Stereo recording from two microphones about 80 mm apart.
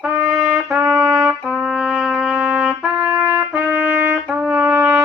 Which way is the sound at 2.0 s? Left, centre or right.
Centre.